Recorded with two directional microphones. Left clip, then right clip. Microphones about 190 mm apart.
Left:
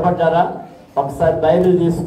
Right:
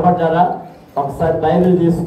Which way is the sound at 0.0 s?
35° left (ahead or behind).